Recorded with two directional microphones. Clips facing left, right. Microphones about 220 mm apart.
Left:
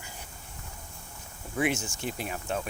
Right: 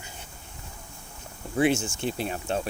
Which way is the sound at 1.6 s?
30° right (ahead or behind).